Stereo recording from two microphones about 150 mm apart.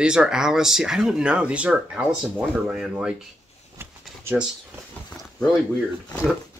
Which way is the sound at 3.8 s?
15° right (ahead or behind).